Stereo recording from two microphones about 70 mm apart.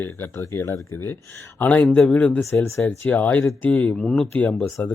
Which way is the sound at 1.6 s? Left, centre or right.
Left.